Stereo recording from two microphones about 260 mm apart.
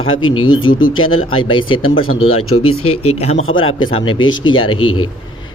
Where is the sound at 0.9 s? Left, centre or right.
Left.